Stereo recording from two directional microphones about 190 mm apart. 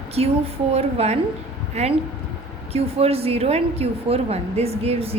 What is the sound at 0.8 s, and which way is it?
A woman's voice, 35° right (ahead or behind).